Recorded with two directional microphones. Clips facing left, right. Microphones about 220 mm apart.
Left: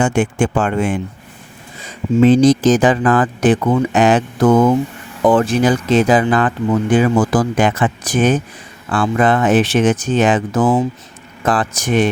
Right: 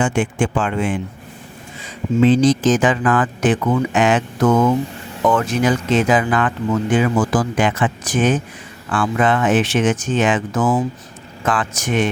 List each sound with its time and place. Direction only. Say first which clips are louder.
0.0 s speech: left 3 dB; 45° left (ahead or behind)
2.2 s speech: left 3 dB; 45° left (ahead or behind)